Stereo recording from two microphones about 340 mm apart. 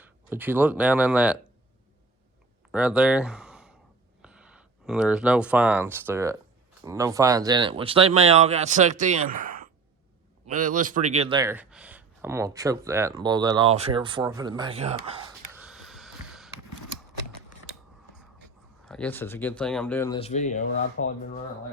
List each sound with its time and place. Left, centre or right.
0.0 s speech: centre
2.7 s speech: centre
15.5 s a sound: centre
18.9 s speech: centre; by 20.7 s left
21.0 s speech: left